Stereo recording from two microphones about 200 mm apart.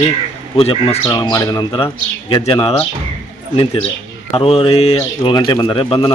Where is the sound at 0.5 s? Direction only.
30° left (ahead or behind).